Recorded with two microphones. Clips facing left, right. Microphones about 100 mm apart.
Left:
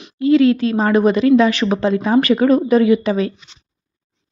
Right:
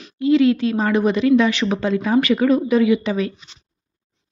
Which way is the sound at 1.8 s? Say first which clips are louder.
Left 3 dB; 35° left (ahead or behind).